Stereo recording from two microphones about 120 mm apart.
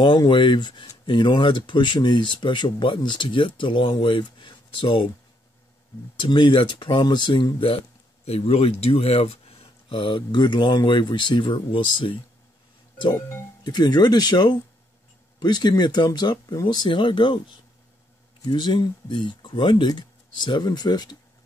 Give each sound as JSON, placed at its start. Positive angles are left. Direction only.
{"t": 0.0, "sound": "speech", "side_deg": 40}
{"t": 6.1, "sound": "speech", "side_deg": 45}
{"t": 13.7, "sound": "speech", "side_deg": 35}
{"t": 18.4, "sound": "speech", "side_deg": 40}